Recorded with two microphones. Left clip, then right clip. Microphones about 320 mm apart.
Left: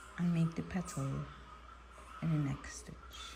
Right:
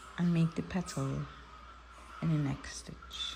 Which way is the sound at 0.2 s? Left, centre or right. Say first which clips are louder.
Right 4 dB; centre.